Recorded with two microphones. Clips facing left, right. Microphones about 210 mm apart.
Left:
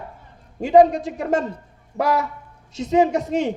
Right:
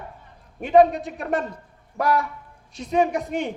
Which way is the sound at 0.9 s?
90° left.